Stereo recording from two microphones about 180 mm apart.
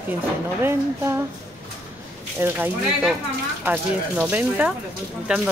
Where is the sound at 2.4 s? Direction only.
10° right (ahead or behind).